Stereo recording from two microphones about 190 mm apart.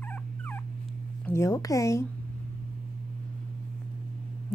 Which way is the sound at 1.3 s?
15° left (ahead or behind).